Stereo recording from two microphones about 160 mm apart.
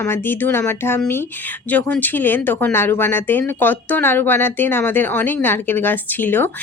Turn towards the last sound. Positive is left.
turn(degrees=15)  # may be behind; listen again after turning